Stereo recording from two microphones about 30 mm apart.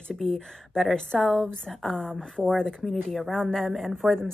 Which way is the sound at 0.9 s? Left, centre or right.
Left.